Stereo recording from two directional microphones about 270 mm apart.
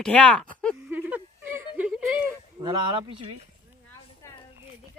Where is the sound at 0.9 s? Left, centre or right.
Centre.